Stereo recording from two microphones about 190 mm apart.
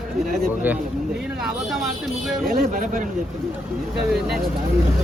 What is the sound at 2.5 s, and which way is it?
Speech, 45° right (ahead or behind).